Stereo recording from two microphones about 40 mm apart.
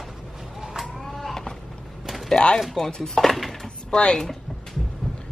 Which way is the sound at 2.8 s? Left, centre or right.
Centre.